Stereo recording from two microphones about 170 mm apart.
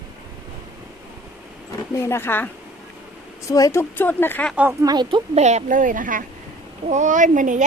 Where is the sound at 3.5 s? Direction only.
20° left (ahead or behind).